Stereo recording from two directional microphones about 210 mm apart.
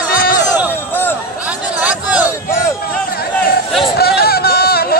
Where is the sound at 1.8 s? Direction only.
5° right (ahead or behind).